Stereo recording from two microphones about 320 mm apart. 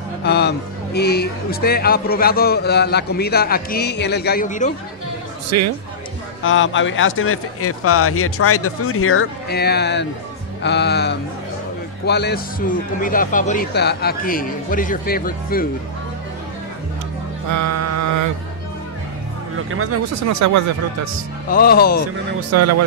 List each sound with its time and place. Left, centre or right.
0.2 s speech: left
5.5 s a man's voice: right
6.4 s speech: left
17.5 s music: right
19.7 s speech: right
21.5 s speech: left
22.5 s a man's voice: right